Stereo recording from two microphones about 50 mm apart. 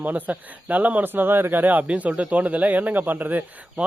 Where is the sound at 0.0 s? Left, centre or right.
Right.